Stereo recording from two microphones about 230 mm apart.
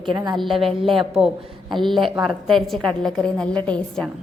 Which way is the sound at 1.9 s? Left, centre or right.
Centre.